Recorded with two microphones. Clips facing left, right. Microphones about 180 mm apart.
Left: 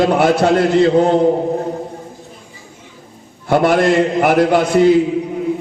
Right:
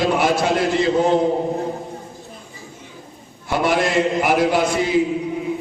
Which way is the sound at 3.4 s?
55° left (ahead or behind).